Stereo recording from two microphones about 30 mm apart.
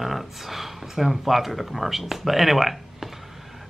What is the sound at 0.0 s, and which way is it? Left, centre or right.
A man's voice, centre.